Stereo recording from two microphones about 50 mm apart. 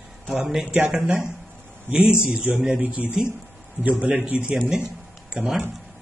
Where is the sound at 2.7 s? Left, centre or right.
Right.